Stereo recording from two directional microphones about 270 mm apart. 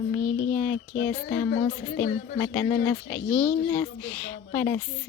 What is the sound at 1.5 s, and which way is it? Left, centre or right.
Speech, left.